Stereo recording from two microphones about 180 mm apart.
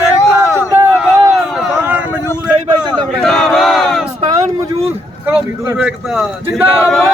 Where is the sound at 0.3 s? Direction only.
15° right (ahead or behind).